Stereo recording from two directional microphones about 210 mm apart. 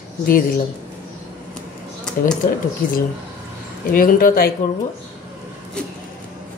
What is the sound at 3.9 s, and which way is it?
Speech, 40° left (ahead or behind).